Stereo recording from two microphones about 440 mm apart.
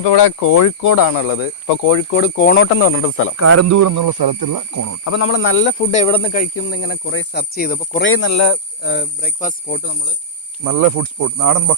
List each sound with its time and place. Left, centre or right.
0.0 s speech: left
0.3 s speech: left
2.0 s speech: left
3.3 s speech: right
4.7 s speech: right
5.0 s speech: left; by 6.5 s centre
6.6 s speech: left
10.6 s speech: right